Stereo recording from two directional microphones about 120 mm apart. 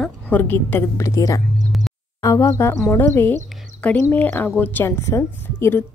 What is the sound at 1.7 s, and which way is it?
Music, centre (ahead or behind).